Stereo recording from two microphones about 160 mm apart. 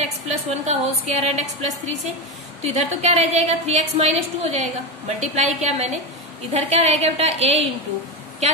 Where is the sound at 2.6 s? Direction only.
40° right (ahead or behind).